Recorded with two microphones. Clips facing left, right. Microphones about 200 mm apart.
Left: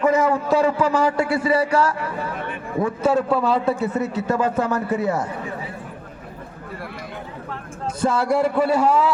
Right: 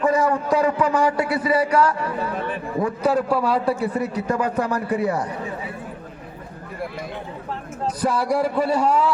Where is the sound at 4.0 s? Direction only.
25° left (ahead or behind).